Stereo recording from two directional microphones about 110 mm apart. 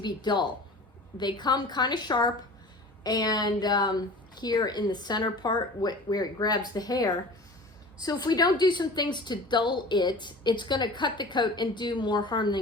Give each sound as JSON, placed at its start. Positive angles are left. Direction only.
{"t": 0.0, "sound": "a woman's voice", "side_deg": 40}